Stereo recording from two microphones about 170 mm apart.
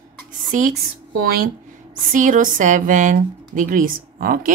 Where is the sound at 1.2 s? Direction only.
60° right (ahead or behind).